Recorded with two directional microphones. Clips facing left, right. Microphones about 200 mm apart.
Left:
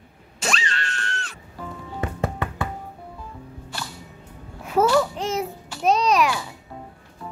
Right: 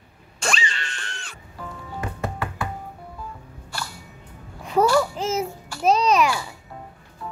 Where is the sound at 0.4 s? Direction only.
Centre (ahead or behind).